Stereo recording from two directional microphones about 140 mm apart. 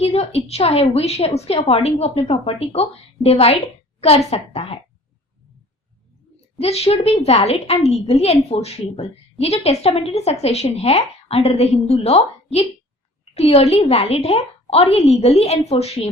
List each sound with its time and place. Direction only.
0.0 s a woman's voice: 45° left (ahead or behind)
6.6 s a woman's voice: 45° left (ahead or behind)